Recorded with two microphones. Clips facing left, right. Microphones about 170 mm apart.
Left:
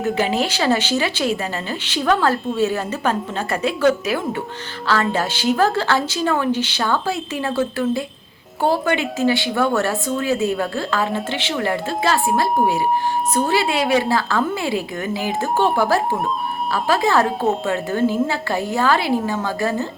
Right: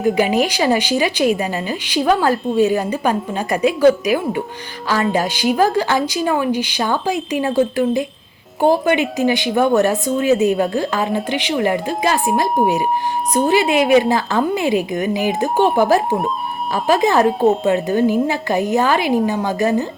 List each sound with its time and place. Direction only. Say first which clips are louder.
0.0 s a woman's voice: right 4 dB; 15° right (ahead or behind)